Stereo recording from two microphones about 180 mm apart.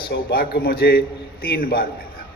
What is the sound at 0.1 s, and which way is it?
A man's voice, 60° left (ahead or behind).